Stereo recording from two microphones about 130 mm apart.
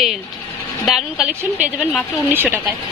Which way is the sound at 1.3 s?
10° right (ahead or behind).